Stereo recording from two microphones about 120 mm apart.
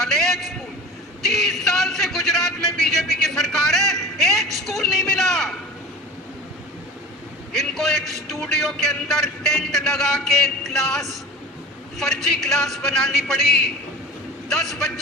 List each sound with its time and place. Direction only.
0.0 s a sound: 5° left (ahead or behind)
7.5 s a man's voice: centre (ahead or behind)
14.5 s a man's voice: 5° left (ahead or behind)